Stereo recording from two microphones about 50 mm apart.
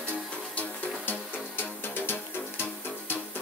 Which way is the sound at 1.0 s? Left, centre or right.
Left.